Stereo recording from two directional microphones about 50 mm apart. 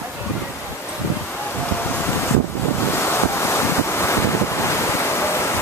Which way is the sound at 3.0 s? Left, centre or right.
Left.